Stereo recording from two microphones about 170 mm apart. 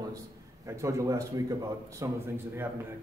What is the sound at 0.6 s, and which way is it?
A man's voice, 20° right (ahead or behind).